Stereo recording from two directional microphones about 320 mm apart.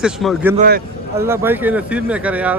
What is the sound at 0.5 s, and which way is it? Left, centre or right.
Speech, right.